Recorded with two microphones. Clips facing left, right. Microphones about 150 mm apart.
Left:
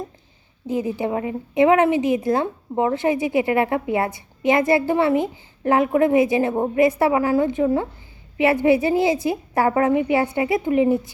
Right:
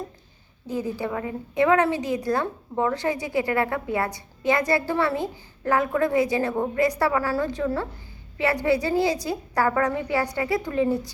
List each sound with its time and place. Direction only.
0.7 s a woman's voice: 20° left (ahead or behind)